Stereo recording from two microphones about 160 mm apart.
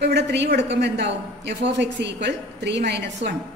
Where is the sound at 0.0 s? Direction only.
90° right.